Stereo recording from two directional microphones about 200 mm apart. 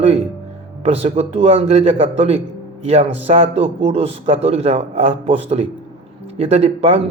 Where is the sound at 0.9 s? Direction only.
30° right (ahead or behind).